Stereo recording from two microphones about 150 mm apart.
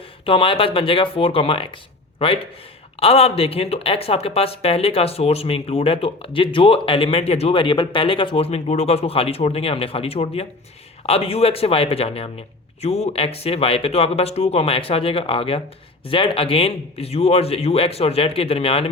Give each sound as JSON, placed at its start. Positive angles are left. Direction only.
{"t": 0.3, "sound": "speech", "side_deg": 35}